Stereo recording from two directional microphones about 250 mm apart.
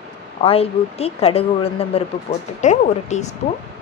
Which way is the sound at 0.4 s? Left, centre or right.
Left.